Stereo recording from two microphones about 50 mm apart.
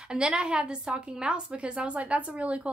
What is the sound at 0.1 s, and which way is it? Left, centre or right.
A woman's voice, right.